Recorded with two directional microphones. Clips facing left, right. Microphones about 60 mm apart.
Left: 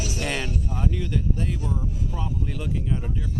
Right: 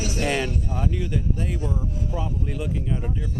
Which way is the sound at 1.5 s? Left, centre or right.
Right.